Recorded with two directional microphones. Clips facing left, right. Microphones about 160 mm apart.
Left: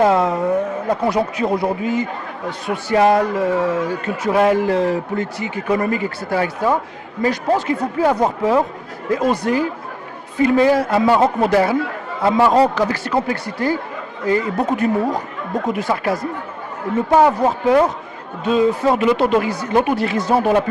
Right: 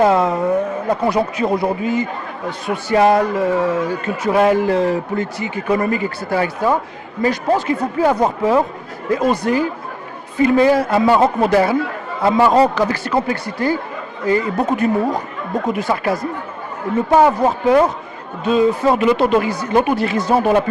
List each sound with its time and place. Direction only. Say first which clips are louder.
0.0 s a man's voice: right 1 dB; 15° right (ahead or behind)